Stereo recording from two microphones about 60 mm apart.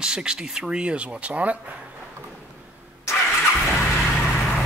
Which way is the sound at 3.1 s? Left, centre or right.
Left.